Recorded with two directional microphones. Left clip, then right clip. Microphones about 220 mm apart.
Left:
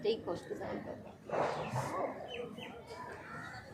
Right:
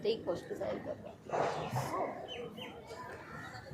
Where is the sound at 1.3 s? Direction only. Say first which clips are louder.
Even; 45° right (ahead or behind).